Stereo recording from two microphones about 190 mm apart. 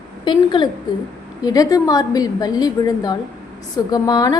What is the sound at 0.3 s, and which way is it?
A woman's voice, 25° left (ahead or behind).